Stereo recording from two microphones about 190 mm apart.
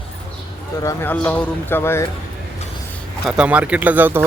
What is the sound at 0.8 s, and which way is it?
Speech, 15° left (ahead or behind).